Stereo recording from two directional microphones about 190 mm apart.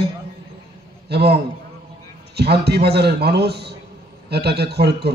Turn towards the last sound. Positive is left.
turn(degrees=-60)  # may be behind; listen again after turning